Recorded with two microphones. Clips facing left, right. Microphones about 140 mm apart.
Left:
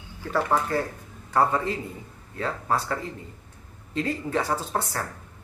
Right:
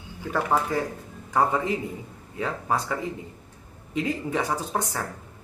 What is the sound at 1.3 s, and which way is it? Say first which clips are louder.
Speech: even; 15° right (ahead or behind).